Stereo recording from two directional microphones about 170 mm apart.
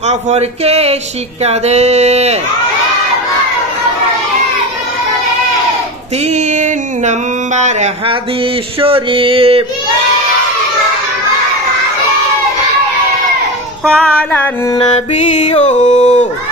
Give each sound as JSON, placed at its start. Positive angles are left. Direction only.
{"t": 0.0, "sound": "speech", "side_deg": -40}
{"t": 6.2, "sound": "a sound", "side_deg": -45}
{"t": 8.8, "sound": "speech", "side_deg": -30}
{"t": 13.8, "sound": "music", "side_deg": 5}
{"t": 15.1, "sound": "music", "side_deg": 40}